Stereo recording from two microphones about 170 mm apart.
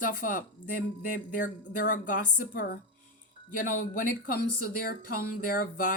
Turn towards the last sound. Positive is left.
turn(degrees=55)  # may be behind; listen again after turning